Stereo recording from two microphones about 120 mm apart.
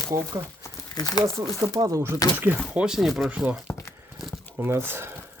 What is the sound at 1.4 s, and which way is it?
Speech, 30° right (ahead or behind).